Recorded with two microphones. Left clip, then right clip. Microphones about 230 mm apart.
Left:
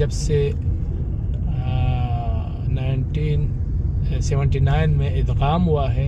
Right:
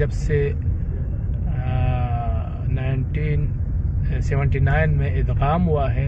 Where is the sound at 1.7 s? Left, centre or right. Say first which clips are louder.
Right 1 dB; left.